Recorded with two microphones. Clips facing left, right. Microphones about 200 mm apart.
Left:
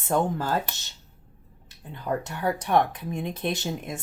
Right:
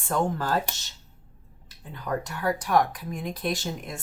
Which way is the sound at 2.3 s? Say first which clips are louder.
Even; 25° left (ahead or behind).